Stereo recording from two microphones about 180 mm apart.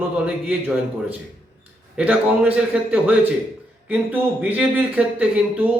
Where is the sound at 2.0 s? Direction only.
5° right (ahead or behind).